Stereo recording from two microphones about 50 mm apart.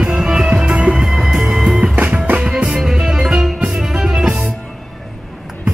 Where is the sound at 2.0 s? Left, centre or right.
Right.